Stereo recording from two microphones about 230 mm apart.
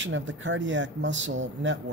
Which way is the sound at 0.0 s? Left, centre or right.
Right.